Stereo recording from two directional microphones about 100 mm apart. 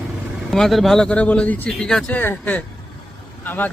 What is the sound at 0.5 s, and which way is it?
Speech, 5° left (ahead or behind).